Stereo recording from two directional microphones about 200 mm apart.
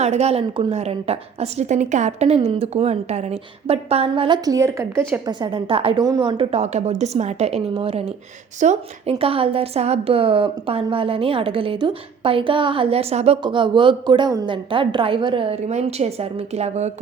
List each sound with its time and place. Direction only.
0.0 s a woman's voice: 35° right (ahead or behind)